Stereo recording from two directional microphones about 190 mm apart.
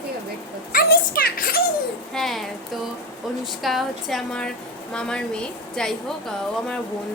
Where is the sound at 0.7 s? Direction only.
50° left (ahead or behind).